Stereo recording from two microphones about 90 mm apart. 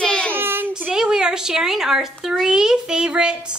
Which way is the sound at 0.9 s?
10° right (ahead or behind).